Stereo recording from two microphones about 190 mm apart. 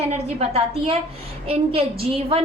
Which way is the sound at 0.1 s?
30° right (ahead or behind).